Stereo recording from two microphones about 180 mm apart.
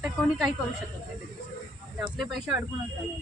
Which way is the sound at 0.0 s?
Centre (ahead or behind).